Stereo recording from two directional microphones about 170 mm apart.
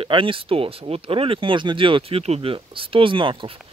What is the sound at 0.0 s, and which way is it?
Speech, 30° right (ahead or behind).